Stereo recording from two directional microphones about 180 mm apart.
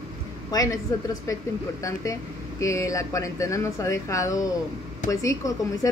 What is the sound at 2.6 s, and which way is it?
Speech, 15° left (ahead or behind).